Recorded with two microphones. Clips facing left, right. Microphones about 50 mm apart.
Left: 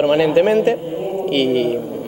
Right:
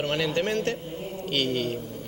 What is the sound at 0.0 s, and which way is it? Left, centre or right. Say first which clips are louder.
A man's voice: left 13 dB; centre.